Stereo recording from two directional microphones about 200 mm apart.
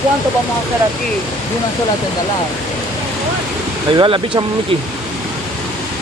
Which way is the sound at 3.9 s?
25° right (ahead or behind).